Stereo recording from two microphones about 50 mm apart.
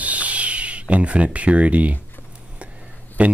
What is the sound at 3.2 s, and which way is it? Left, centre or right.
Speech, right.